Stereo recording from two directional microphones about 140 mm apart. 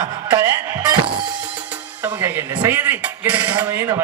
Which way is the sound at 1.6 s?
10° right (ahead or behind).